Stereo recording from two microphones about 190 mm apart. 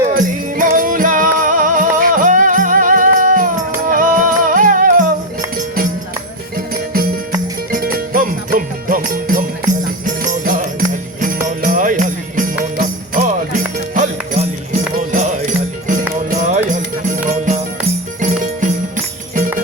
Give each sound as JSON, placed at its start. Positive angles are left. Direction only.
{"t": 0.1, "sound": "music", "side_deg": -45}
{"t": 7.7, "sound": "music", "side_deg": -45}